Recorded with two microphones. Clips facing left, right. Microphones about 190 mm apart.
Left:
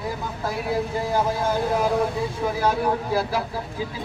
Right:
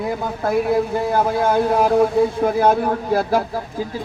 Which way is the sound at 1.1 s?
60° right (ahead or behind).